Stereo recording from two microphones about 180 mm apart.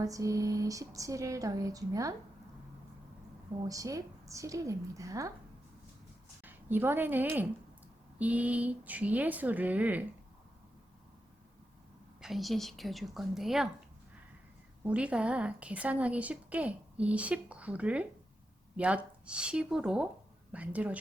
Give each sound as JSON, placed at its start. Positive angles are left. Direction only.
{"t": 0.0, "sound": "speech", "side_deg": -20}
{"t": 3.7, "sound": "a woman's voice", "side_deg": -20}
{"t": 6.4, "sound": "a woman's voice", "side_deg": -10}
{"t": 12.2, "sound": "a woman's voice", "side_deg": 0}
{"t": 14.8, "sound": "a woman's voice", "side_deg": -5}